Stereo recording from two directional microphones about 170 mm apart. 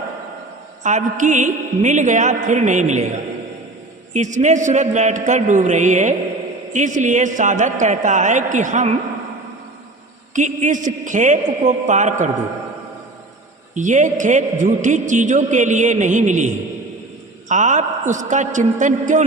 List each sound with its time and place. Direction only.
0.8 s a man's voice: 45° right (ahead or behind)
10.3 s a man's voice: 45° right (ahead or behind)
13.7 s a man's voice: 45° right (ahead or behind)